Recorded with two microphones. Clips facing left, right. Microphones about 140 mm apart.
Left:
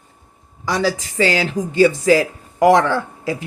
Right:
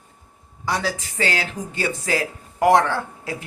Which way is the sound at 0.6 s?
90° left.